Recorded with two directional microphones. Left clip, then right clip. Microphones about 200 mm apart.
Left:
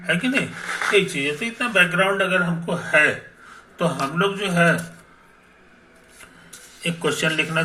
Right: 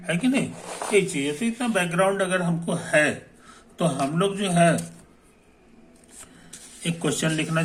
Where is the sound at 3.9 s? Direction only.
30° right (ahead or behind).